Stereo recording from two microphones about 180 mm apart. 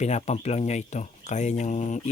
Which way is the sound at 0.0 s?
40° left (ahead or behind).